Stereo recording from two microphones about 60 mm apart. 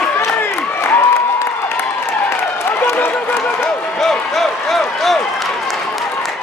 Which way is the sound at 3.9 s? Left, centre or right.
Centre.